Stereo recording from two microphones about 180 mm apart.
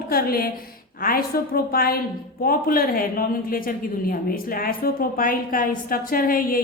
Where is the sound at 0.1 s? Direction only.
55° left (ahead or behind).